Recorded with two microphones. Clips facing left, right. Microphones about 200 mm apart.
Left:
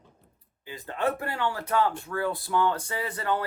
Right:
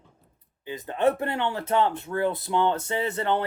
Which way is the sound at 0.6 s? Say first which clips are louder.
Right 5 dB; 20° right (ahead or behind).